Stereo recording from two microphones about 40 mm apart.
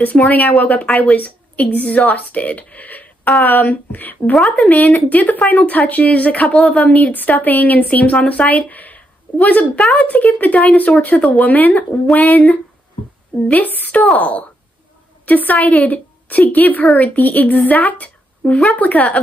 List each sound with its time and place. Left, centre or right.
0.1 s speech: left
4.3 s speech: left
4.7 s speech: left
13.5 s a woman's voice: left